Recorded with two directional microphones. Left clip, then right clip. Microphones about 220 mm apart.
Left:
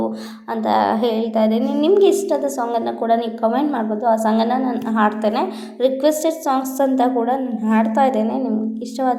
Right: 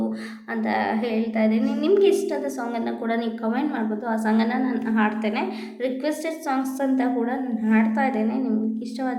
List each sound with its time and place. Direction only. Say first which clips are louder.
0.5 s a woman's voice: left 7 dB; 20° left (ahead or behind)